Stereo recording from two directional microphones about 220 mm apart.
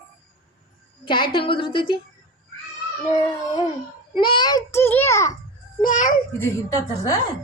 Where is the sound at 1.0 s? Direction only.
20° left (ahead or behind).